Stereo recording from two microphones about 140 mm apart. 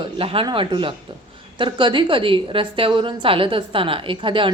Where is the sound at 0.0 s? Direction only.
40° right (ahead or behind).